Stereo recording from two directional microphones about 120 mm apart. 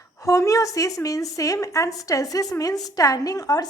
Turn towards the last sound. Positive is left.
turn(degrees=30)  # may be behind; listen again after turning